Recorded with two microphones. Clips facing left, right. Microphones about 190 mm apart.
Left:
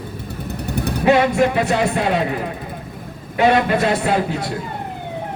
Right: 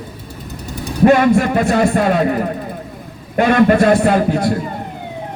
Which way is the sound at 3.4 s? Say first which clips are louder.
Right 4 dB; 50° right (ahead or behind).